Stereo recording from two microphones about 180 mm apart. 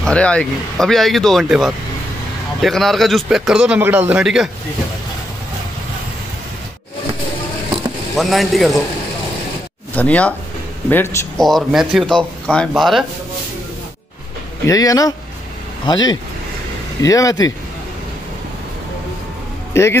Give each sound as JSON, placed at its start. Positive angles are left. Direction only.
{"t": 0.0, "sound": "speech", "side_deg": 5}
{"t": 8.2, "sound": "speech", "side_deg": 0}
{"t": 9.9, "sound": "speech", "side_deg": 10}
{"t": 11.4, "sound": "speech", "side_deg": 0}
{"t": 14.7, "sound": "speech", "side_deg": 20}
{"t": 19.7, "sound": "speech", "side_deg": 15}